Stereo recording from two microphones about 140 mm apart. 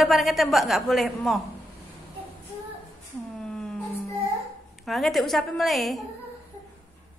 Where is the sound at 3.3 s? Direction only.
5° left (ahead or behind).